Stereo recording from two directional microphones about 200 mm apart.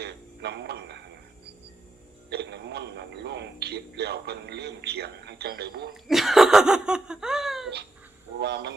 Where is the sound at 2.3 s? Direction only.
55° right (ahead or behind).